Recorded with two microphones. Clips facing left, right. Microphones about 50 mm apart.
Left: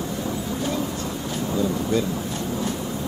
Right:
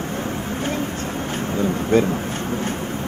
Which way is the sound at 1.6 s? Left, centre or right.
Right.